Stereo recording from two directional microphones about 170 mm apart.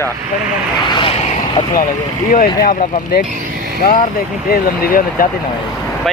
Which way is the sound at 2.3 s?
55° left (ahead or behind).